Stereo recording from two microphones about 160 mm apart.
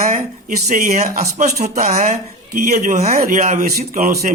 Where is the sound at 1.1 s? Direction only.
45° right (ahead or behind).